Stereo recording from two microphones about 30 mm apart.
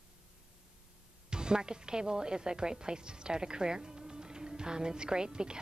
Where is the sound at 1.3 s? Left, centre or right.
Right.